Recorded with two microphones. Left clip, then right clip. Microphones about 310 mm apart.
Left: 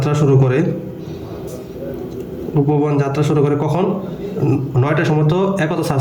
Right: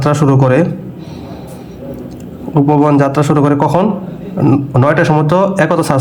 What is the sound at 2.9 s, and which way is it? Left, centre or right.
Speech, centre.